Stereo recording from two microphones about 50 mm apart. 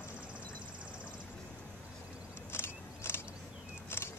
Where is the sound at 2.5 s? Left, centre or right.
Left.